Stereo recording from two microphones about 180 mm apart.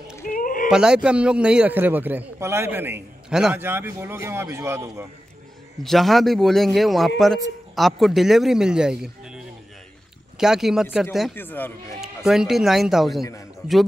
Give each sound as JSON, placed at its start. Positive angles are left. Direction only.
{"t": 0.2, "sound": "a sound", "side_deg": 50}
{"t": 0.7, "sound": "a man's voice", "side_deg": -5}
{"t": 5.8, "sound": "speech", "side_deg": 0}
{"t": 10.4, "sound": "speech", "side_deg": -5}
{"t": 11.3, "sound": "speech", "side_deg": 10}
{"t": 12.3, "sound": "speech", "side_deg": 0}
{"t": 13.2, "sound": "speech", "side_deg": 20}